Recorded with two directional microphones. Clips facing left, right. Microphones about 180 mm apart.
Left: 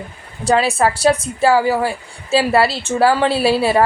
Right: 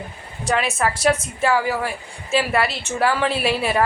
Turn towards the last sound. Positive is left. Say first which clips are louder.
# left 6 dB
turn(degrees=30)  # may be behind; listen again after turning